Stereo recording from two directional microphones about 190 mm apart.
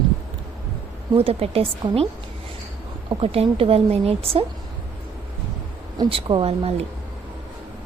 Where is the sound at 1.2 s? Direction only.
30° right (ahead or behind).